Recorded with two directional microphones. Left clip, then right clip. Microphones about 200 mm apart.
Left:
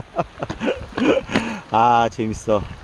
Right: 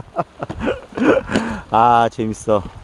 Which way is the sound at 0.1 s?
5° right (ahead or behind).